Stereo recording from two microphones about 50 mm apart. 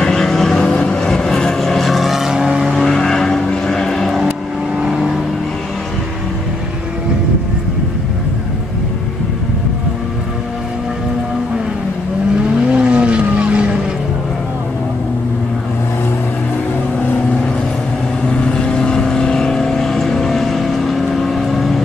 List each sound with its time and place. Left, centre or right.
0.0 s vehicle: centre
0.7 s vehicle: left; by 2.5 s centre
2.7 s vehicle: centre
4.7 s vehicle: centre
12.7 s vehicle: right
18.4 s vehicle: centre